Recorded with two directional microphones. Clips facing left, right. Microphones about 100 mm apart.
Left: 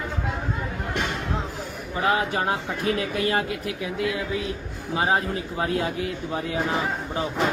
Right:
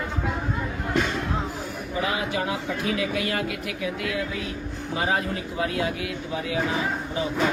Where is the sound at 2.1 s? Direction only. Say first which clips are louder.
Left 6 dB; 45° left (ahead or behind).